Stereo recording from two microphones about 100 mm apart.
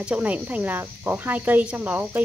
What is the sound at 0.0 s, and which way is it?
Speech, 15° right (ahead or behind).